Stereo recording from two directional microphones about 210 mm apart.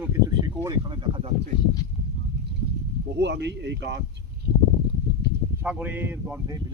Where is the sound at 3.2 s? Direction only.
55° right (ahead or behind).